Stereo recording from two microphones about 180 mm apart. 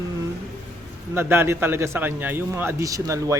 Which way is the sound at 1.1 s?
10° right (ahead or behind).